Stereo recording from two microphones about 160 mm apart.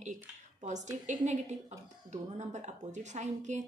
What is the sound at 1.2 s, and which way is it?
A woman's voice, 45° right (ahead or behind).